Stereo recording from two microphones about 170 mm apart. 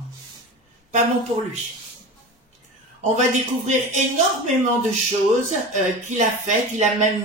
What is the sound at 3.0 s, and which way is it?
Speech, 45° right (ahead or behind).